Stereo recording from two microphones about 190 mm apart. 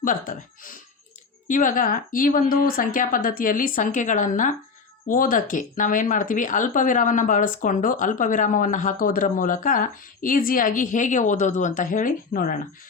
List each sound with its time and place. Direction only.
0.0 s speech: 45° left (ahead or behind)